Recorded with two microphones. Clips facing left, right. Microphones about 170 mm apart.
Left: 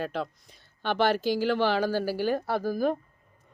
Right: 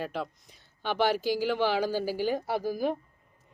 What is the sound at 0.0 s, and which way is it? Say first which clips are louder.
Speech: left 2 dB; 10° right (ahead or behind).